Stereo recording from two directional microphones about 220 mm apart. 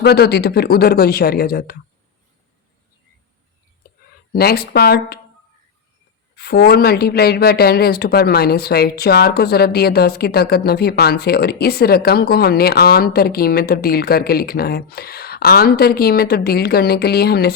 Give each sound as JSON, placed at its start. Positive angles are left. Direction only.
{"t": 0.0, "sound": "speech", "side_deg": 45}
{"t": 4.3, "sound": "speech", "side_deg": 45}
{"t": 6.3, "sound": "speech", "side_deg": 45}